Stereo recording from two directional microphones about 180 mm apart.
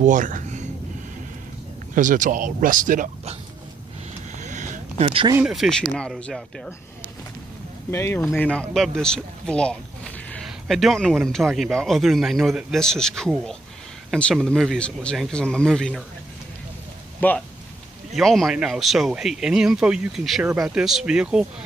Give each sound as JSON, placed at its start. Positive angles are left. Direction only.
{"t": 0.0, "sound": "speech", "side_deg": -45}
{"t": 2.0, "sound": "speech", "side_deg": -45}
{"t": 4.4, "sound": "a sound", "side_deg": -45}
{"t": 5.5, "sound": "speech", "side_deg": 0}
{"t": 7.9, "sound": "speech", "side_deg": 15}
{"t": 17.2, "sound": "speech", "side_deg": 10}
{"t": 18.1, "sound": "speech", "side_deg": 0}